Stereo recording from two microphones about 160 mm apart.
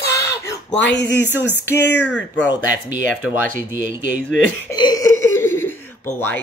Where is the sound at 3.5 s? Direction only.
55° right (ahead or behind).